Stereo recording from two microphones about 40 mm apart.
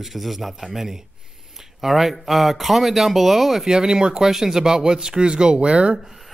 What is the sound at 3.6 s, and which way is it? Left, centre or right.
Speech, centre.